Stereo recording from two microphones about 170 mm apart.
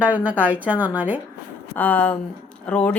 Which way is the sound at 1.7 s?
10° left (ahead or behind).